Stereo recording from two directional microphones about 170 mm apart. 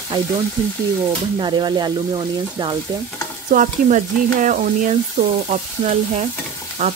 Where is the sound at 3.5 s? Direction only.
50° right (ahead or behind).